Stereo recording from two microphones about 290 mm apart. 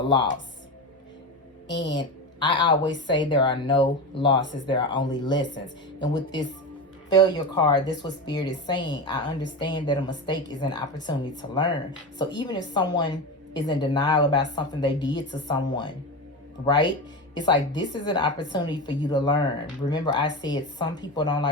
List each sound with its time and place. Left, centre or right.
1.6 s a woman's voice: centre